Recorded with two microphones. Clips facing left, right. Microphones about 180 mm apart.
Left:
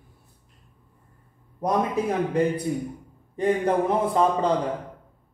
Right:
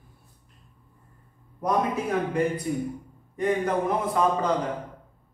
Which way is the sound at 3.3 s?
30° left (ahead or behind).